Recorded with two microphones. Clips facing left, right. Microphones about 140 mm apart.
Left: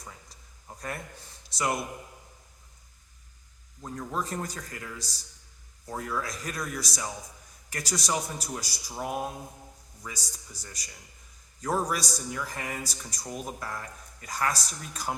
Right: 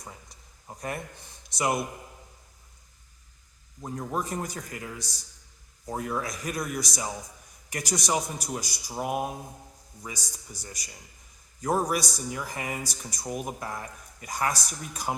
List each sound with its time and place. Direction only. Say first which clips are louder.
0.7 s a sound: right 3 dB; 20° right (ahead or behind)
1.5 s a man's voice: right 2 dB; 15° right (ahead or behind)
3.8 s a man's voice: right 2 dB; 15° right (ahead or behind)